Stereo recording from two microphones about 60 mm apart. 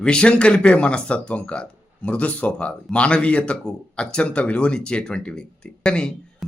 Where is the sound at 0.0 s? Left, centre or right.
Centre.